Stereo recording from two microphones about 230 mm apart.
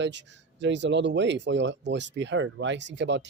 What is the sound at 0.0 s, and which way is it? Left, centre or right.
Speech, right.